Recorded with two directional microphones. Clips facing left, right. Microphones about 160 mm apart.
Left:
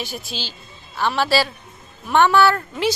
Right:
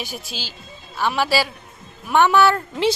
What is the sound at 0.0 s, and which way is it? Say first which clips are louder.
A woman's voice: left 2 dB; 10° right (ahead or behind).